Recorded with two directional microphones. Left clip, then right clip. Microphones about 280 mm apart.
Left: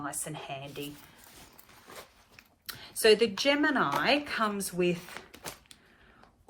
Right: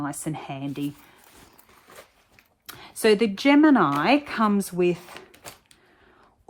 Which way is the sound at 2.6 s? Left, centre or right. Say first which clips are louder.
Right 3 dB; right.